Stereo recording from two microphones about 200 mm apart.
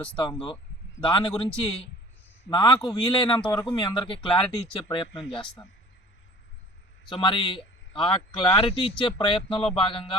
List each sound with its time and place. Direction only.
0.2 s a man's voice: 25° left (ahead or behind)
2.5 s a man's voice: 25° left (ahead or behind)
7.1 s a man's voice: 25° left (ahead or behind)